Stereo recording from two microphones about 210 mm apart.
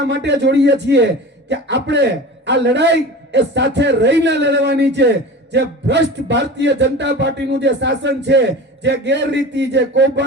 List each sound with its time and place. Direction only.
0.0 s a man's voice: 55° right (ahead or behind)